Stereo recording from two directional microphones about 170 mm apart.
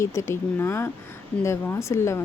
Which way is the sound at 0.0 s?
15° left (ahead or behind).